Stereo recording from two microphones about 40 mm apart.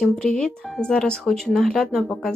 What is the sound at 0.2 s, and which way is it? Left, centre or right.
Speech, left.